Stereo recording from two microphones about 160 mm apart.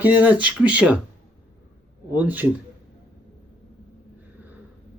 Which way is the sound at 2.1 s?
10° right (ahead or behind).